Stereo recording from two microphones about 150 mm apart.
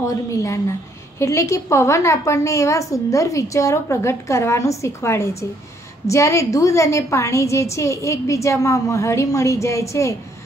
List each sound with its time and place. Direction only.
0.0 s a woman's voice: 20° left (ahead or behind)